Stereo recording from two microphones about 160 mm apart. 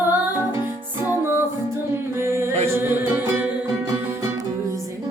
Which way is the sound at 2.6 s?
15° right (ahead or behind).